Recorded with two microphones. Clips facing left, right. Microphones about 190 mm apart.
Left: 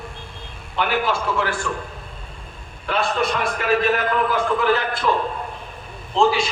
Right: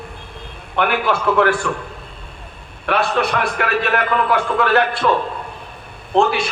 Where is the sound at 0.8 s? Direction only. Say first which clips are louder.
Right 3 dB; 60° right (ahead or behind).